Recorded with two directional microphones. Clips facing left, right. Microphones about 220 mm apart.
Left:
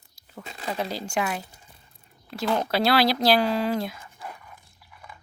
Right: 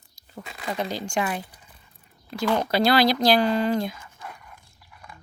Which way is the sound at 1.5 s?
25° left (ahead or behind).